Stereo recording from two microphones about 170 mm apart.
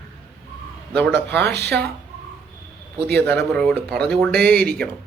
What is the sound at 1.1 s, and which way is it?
Speech, 80° right.